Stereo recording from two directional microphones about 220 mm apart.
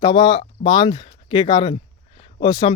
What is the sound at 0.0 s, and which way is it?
Speech, 20° left (ahead or behind).